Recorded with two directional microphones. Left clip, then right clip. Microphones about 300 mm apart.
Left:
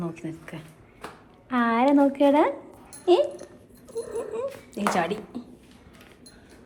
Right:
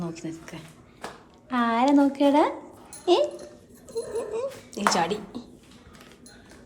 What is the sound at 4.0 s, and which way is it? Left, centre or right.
Dog, centre.